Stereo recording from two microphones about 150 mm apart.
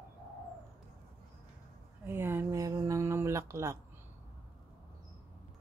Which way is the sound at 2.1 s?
15° right (ahead or behind).